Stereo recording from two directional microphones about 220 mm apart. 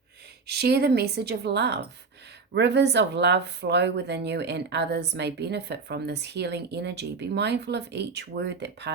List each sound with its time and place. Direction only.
0.4 s a woman's voice: 50° right (ahead or behind)